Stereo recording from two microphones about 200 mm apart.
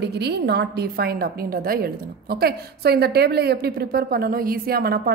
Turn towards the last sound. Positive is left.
turn(degrees=-50)  # may be behind; listen again after turning